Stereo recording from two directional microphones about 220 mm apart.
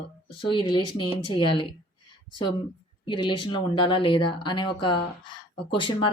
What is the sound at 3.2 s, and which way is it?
Speech, 20° left (ahead or behind).